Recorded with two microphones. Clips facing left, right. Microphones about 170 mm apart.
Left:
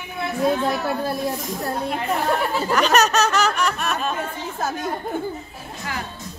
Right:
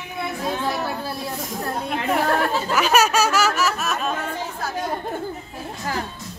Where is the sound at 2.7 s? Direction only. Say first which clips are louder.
Left 1 dB; 5° right (ahead or behind).